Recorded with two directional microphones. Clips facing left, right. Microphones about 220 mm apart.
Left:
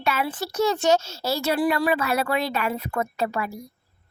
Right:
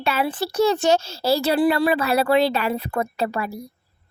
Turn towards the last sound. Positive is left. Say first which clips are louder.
# right 2 dB
turn(degrees=-35)  # may be behind; listen again after turning